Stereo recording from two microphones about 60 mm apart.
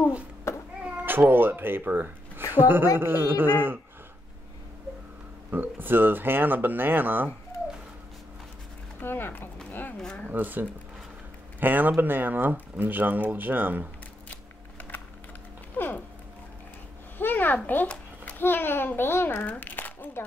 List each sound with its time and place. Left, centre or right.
1.0 s speech: right
5.5 s speech: right
9.0 s speech: left
9.7 s a sound: left
9.9 s speech: centre
10.3 s speech: right
14.3 s a sound: left
17.2 s a sound: left
18.4 s a child's voice: left